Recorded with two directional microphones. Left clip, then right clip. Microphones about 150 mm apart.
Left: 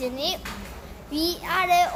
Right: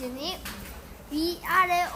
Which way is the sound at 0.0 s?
10° left (ahead or behind).